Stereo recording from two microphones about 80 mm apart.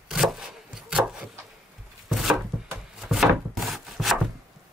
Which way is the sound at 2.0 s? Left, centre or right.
Centre.